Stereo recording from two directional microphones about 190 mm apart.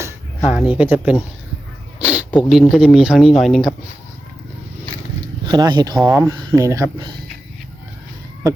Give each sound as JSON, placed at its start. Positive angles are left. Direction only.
{"t": 0.4, "sound": "speech", "side_deg": -5}
{"t": 2.0, "sound": "a sound", "side_deg": -5}
{"t": 2.5, "sound": "speech", "side_deg": 0}
{"t": 5.5, "sound": "speech", "side_deg": -20}
{"t": 6.0, "sound": "speech", "side_deg": -10}